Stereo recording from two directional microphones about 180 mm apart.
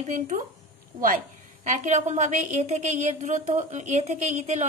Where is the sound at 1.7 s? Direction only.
40° right (ahead or behind).